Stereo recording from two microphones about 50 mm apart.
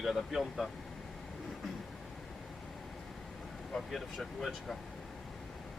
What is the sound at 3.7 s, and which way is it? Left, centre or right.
Speech, centre.